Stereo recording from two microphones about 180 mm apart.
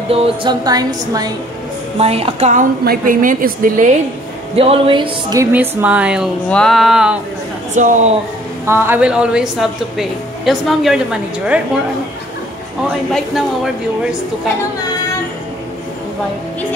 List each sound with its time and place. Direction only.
0.1 s speech: 25° right (ahead or behind)
2.0 s a woman's voice: 35° right (ahead or behind)
4.6 s speech: 30° right (ahead or behind)
5.4 s a woman's voice: 10° right (ahead or behind)
7.7 s a woman's voice: 45° right (ahead or behind)
8.6 s a woman's voice: 10° right (ahead or behind)
13.1 s a woman's voice: centre (ahead or behind)